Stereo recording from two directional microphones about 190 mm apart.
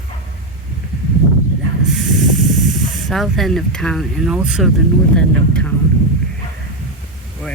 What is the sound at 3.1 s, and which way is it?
Speech, centre (ahead or behind).